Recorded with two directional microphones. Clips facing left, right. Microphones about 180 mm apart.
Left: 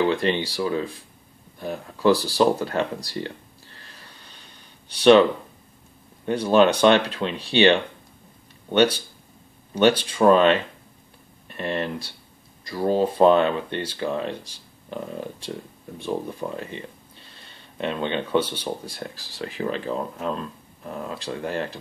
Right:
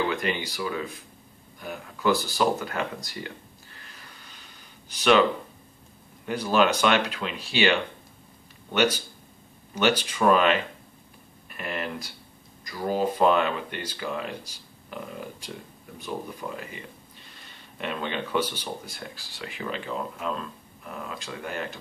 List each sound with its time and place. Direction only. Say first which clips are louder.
0.1 s speech: left 6 dB; 30° left (ahead or behind)
6.2 s speech: left 5 dB; 30° left (ahead or behind)
11.4 s a sound: left 6 dB; 30° left (ahead or behind)
12.6 s speech: left 5 dB; 30° left (ahead or behind)